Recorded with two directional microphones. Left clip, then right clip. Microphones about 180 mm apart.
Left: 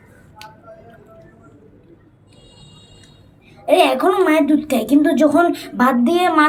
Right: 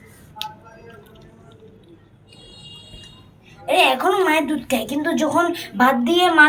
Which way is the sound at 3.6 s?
50° left (ahead or behind).